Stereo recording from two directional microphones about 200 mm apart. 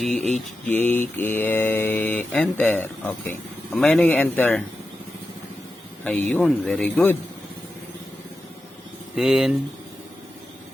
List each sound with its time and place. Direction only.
0.0 s speech: centre (ahead or behind)
0.3 s mantra: 10° left (ahead or behind)
3.8 s speech: 5° left (ahead or behind)
6.1 s mantra: 10° left (ahead or behind)
9.1 s speech: centre (ahead or behind)